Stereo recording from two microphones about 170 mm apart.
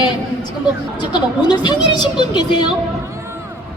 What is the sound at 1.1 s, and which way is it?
A woman's voice, 25° left (ahead or behind).